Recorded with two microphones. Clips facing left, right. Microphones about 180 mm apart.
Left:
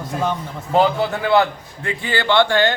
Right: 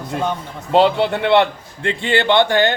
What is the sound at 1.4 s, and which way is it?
A man's voice, 25° right (ahead or behind).